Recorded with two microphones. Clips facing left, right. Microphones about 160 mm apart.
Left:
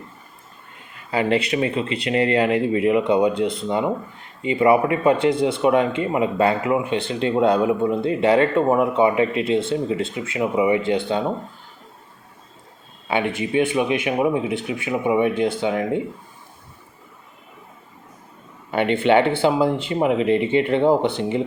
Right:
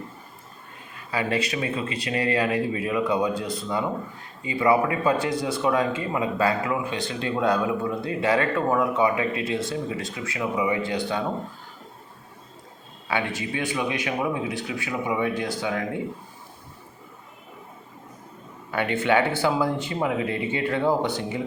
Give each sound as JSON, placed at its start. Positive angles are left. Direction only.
{"t": 1.1, "sound": "a man's voice", "side_deg": 25}
{"t": 13.1, "sound": "a man's voice", "side_deg": 20}
{"t": 18.7, "sound": "a man's voice", "side_deg": 25}